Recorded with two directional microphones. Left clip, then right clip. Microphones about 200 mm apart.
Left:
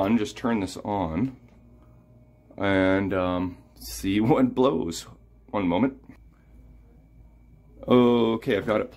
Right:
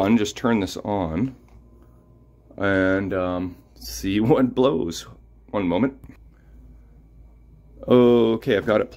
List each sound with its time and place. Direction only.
0.0 s speech: 30° right (ahead or behind); by 1.3 s 10° right (ahead or behind)
2.5 s speech: 10° right (ahead or behind)
7.8 s speech: 10° right (ahead or behind)